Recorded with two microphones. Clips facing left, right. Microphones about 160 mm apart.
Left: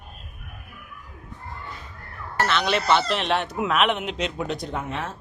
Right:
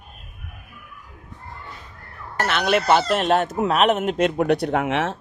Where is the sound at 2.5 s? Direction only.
50° right (ahead or behind); by 5.2 s 85° right.